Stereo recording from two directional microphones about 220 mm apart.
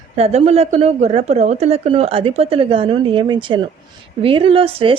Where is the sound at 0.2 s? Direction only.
30° right (ahead or behind).